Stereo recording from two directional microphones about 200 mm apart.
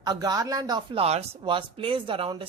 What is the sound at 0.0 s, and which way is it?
Speech, 20° right (ahead or behind).